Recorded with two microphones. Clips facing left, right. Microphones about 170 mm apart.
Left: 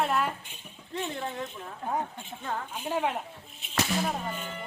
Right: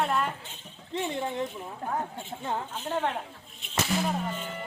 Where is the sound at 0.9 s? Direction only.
20° right (ahead or behind).